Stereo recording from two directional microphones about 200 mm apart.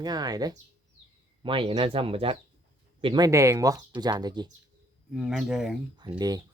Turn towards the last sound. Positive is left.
turn(degrees=-20)  # may be behind; listen again after turning